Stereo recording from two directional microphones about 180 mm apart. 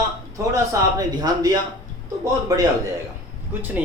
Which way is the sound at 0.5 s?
20° right (ahead or behind).